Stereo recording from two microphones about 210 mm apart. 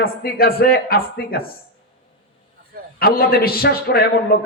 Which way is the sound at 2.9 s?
45° left (ahead or behind).